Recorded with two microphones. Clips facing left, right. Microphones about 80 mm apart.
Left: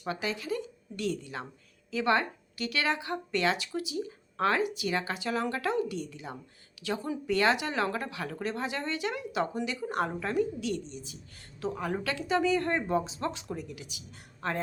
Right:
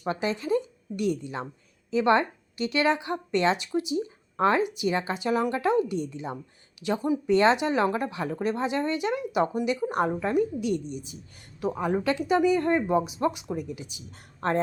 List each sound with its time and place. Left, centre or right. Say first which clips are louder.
0.0 s a woman's voice: right 5 dB; right
14.1 s speech: right 7 dB; right